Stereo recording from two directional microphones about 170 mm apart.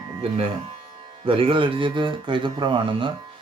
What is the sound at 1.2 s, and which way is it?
Speech, 30° right (ahead or behind).